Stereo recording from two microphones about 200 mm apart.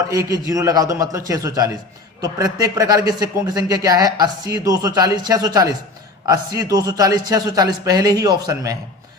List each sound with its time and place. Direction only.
0.1 s speech: 15° right (ahead or behind)